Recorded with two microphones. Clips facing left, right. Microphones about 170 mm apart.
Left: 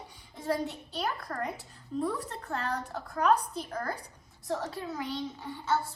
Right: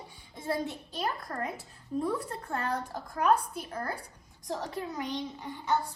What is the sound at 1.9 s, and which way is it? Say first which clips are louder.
Speech: right 1 dB; 15° right (ahead or behind).